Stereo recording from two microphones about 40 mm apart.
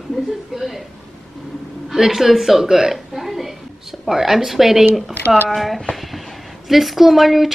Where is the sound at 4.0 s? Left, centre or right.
Centre.